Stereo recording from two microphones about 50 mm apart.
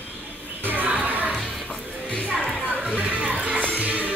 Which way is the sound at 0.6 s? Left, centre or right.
Right.